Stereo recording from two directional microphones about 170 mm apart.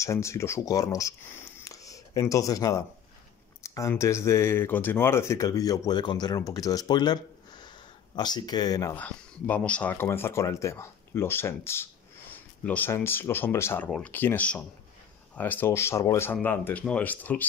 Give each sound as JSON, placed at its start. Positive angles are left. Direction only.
{"t": 0.0, "sound": "speech", "side_deg": 15}
{"t": 1.6, "sound": "a sound", "side_deg": 20}
{"t": 3.6, "sound": "speech", "side_deg": 20}
{"t": 8.2, "sound": "speech", "side_deg": 25}
{"t": 8.9, "sound": "speech", "side_deg": 10}
{"t": 13.8, "sound": "speech", "side_deg": 0}